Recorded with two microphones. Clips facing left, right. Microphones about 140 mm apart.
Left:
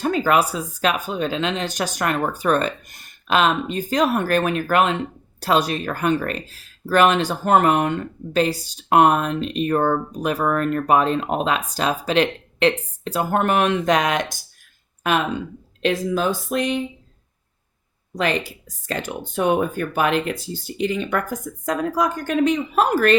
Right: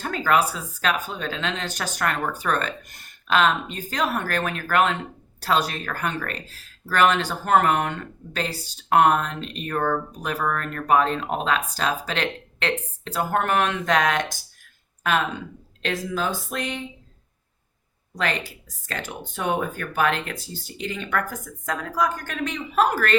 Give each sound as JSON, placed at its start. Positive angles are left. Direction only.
{"t": 0.0, "sound": "speech", "side_deg": 15}
{"t": 15.8, "sound": "speech", "side_deg": 20}
{"t": 18.2, "sound": "speech", "side_deg": 15}